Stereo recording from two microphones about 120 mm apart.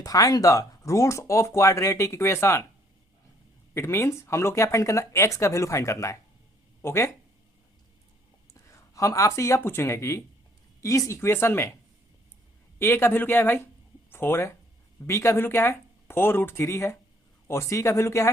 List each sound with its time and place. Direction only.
0.0 s speech: 30° left (ahead or behind)
3.8 s speech: 20° left (ahead or behind)
8.5 s speech: 25° left (ahead or behind)
12.8 s speech: 20° left (ahead or behind)